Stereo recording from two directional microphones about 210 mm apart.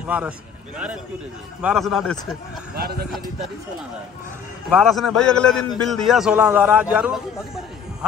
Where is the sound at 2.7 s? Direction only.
50° right (ahead or behind).